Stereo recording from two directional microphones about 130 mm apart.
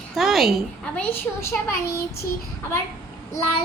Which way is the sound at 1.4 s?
20° left (ahead or behind).